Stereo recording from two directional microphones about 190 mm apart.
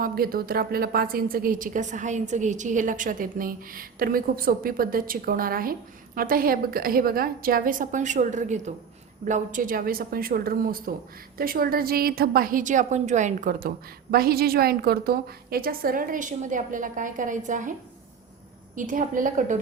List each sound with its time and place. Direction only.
0.0 s a woman's voice: 50° right (ahead or behind)
18.8 s a woman's voice: 45° right (ahead or behind)